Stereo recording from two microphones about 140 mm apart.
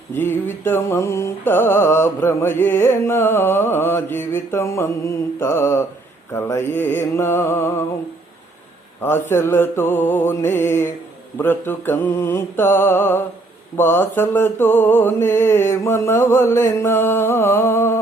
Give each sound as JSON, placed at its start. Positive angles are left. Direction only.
{"t": 0.1, "sound": "mantra", "side_deg": 15}
{"t": 9.0, "sound": "mantra", "side_deg": 15}